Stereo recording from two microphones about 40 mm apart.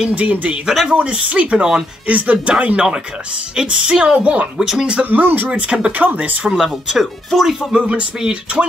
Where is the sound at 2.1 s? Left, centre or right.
Right.